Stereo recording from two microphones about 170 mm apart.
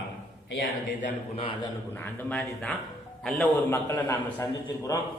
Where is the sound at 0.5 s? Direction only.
55° left (ahead or behind).